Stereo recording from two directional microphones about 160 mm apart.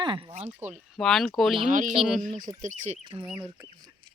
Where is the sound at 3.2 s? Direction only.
5° right (ahead or behind).